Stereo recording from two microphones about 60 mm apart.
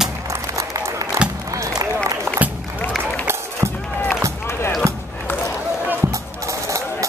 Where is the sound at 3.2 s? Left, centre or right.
Right.